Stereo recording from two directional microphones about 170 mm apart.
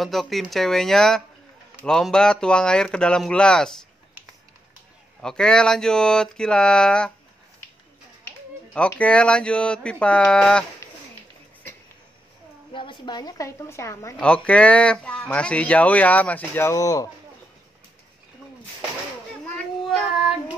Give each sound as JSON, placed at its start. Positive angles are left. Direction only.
{"t": 0.0, "sound": "speech", "side_deg": 0}
{"t": 5.2, "sound": "speech", "side_deg": 5}
{"t": 8.7, "sound": "speech", "side_deg": 5}
{"t": 12.7, "sound": "a woman's voice", "side_deg": 30}
{"t": 14.1, "sound": "speech", "side_deg": 5}
{"t": 19.4, "sound": "child singing", "side_deg": 5}